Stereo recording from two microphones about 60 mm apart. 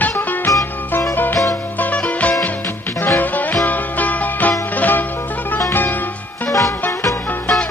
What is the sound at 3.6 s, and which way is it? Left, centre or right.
Music, left.